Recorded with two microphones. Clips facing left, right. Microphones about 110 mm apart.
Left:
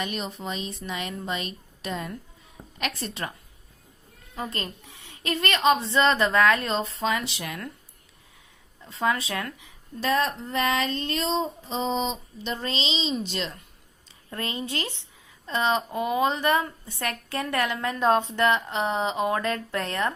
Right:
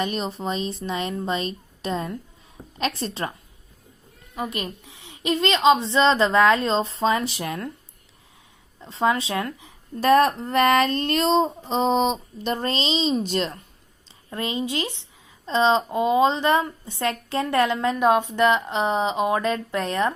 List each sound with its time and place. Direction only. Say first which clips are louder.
0.0 s a woman's voice: right 5 dB; 35° right (ahead or behind)
4.4 s a woman's voice: right 4 dB; 15° right (ahead or behind); by 7.7 s 30° right (ahead or behind)
8.8 s a woman's voice: right 4 dB; 25° right (ahead or behind)
10.0 s speech: right 8 dB; 55° right (ahead or behind)
12.4 s a woman's voice: right 3 dB; 50° right (ahead or behind)
14.3 s a woman's voice: right 5 dB; 20° right (ahead or behind)